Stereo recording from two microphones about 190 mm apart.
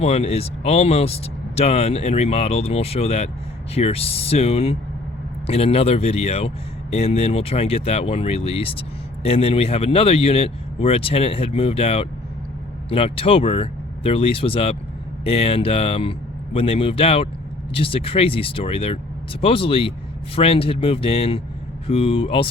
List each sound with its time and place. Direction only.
0.0 s speech: 30° left (ahead or behind)